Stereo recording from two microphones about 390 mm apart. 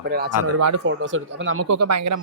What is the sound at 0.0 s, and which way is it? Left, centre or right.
Speech, right.